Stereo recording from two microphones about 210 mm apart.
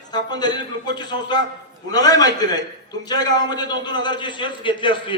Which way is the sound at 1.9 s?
20° left (ahead or behind).